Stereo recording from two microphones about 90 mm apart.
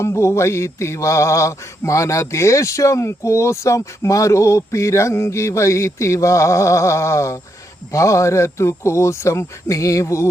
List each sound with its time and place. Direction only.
0.0 s mantra: 30° left (ahead or behind)